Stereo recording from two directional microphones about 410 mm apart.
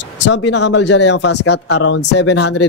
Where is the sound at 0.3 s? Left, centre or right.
Left.